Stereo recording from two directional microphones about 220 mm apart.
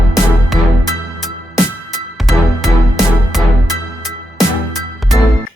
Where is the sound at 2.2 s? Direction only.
Centre (ahead or behind).